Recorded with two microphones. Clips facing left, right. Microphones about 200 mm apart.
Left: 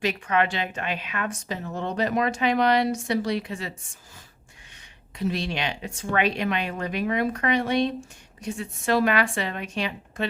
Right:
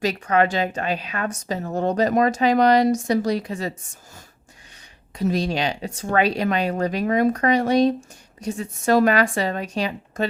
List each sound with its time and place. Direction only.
0.0 s a woman's voice: 40° right (ahead or behind)
5.1 s a woman's voice: 40° right (ahead or behind)